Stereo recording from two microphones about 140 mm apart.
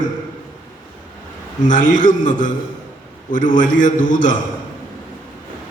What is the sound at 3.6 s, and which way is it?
Speech, 65° left (ahead or behind).